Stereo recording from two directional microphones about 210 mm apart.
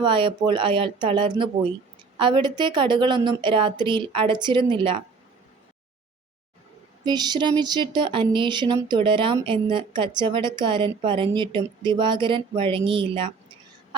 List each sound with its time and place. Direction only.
0.0 s speech: 25° right (ahead or behind)
7.0 s speech: 20° right (ahead or behind)